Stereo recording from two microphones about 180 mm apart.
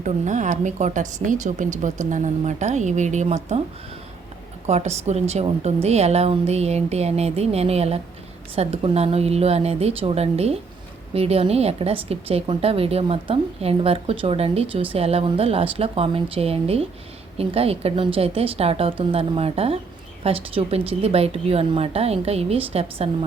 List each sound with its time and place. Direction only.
0.0 s speech: 40° right (ahead or behind)
4.6 s a woman's voice: 40° right (ahead or behind)